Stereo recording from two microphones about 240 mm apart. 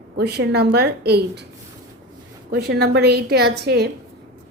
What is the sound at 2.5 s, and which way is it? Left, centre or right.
A woman's voice, right.